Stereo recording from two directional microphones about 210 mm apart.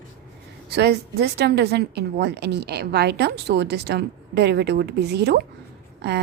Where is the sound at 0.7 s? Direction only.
50° right (ahead or behind).